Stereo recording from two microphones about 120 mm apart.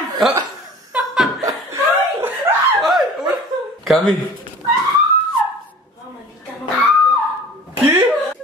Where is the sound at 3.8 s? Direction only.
5° left (ahead or behind).